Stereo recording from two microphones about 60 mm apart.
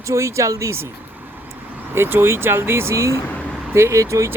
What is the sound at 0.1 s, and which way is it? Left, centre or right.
Speech, right.